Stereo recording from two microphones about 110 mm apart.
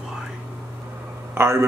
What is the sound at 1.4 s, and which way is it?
Speech, 25° right (ahead or behind).